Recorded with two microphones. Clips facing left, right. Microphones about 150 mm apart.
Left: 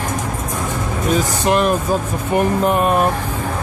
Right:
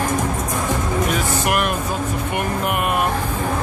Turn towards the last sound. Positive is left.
turn(degrees=35)  # may be behind; listen again after turning